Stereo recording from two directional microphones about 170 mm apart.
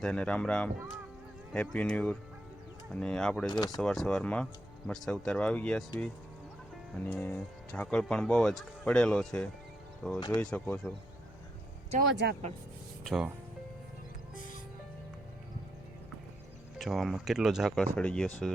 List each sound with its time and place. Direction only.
0.0 s speech: 5° left (ahead or behind)
3.5 s speech: 25° left (ahead or behind)
3.8 s speech: 5° left (ahead or behind)
6.9 s speech: 10° left (ahead or behind)
10.2 s speech: 25° left (ahead or behind)
10.4 s speech: 5° left (ahead or behind)
11.9 s speech: 80° right
13.1 s speech: 5° right (ahead or behind)
16.7 s speech: centre (ahead or behind)